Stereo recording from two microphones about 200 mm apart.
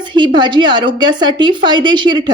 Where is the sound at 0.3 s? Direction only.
25° right (ahead or behind).